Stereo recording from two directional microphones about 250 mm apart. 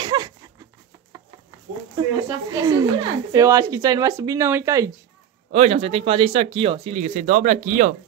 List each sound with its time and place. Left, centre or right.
0.0 s a sound: centre
2.0 s speech: centre
5.5 s speech: right